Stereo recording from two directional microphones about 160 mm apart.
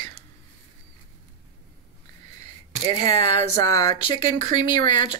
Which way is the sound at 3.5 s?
20° left (ahead or behind).